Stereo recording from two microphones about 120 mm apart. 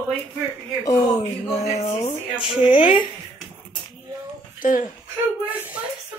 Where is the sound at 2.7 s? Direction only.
45° left (ahead or behind).